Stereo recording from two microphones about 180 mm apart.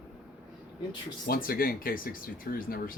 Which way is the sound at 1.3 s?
55° left (ahead or behind).